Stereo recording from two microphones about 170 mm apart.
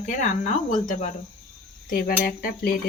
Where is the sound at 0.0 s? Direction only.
50° left (ahead or behind).